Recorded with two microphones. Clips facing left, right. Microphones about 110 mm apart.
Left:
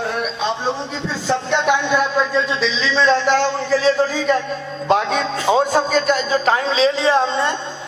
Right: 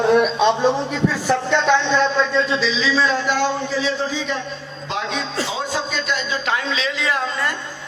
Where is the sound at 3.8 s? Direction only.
45° left (ahead or behind); by 7.5 s 30° left (ahead or behind).